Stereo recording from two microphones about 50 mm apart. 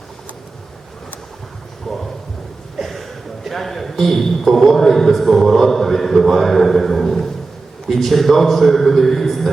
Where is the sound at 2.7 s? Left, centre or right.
Centre.